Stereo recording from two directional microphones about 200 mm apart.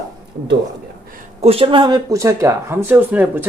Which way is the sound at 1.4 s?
30° right (ahead or behind).